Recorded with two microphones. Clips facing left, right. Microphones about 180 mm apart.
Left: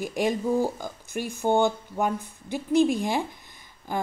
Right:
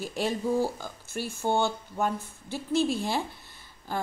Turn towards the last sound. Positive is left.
turn(degrees=15)  # may be behind; listen again after turning